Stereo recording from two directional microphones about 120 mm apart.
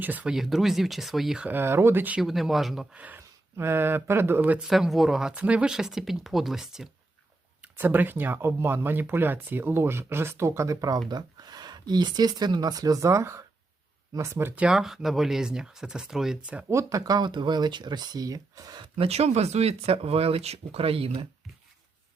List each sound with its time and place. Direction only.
0.0 s speech: 15° right (ahead or behind)
0.3 s speech: centre (ahead or behind)
1.5 s speech: 20° right (ahead or behind)
2.2 s speech: centre (ahead or behind)
2.9 s speech: 10° right (ahead or behind)
7.6 s speech: 15° right (ahead or behind)
16.6 s speech: 25° right (ahead or behind)
18.9 s speech: 60° right (ahead or behind)